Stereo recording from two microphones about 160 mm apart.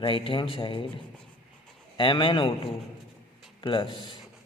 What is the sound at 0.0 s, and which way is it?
Speech, 30° left (ahead or behind).